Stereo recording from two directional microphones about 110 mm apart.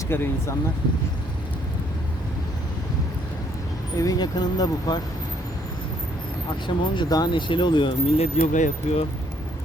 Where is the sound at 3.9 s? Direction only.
35° left (ahead or behind).